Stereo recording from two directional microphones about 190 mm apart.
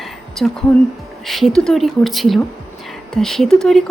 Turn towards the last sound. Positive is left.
turn(degrees=0)  # may be behind; listen again after turning